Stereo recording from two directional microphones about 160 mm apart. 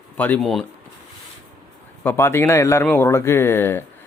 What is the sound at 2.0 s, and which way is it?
Speech, 15° left (ahead or behind).